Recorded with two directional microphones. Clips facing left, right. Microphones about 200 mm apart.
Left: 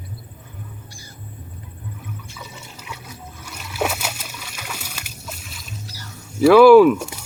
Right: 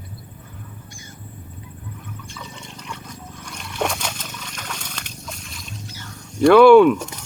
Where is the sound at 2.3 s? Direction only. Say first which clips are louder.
Right 1 dB; 5° left (ahead or behind).